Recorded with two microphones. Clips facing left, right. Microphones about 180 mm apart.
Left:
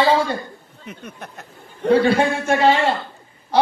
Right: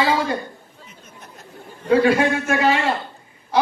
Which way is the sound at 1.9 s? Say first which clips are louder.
Even; 30° left (ahead or behind).